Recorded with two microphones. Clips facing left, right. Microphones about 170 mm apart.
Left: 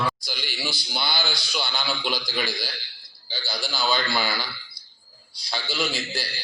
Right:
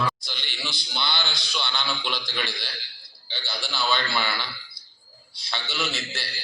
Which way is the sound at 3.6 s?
Centre (ahead or behind).